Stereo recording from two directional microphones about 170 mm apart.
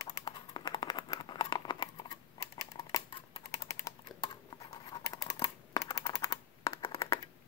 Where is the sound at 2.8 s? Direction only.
20° left (ahead or behind).